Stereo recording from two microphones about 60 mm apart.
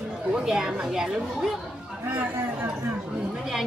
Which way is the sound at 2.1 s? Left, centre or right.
Right.